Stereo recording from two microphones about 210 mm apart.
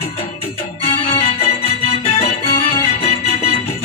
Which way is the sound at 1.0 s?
25° left (ahead or behind).